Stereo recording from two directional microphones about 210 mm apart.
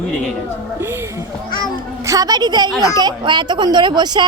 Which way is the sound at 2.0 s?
15° right (ahead or behind).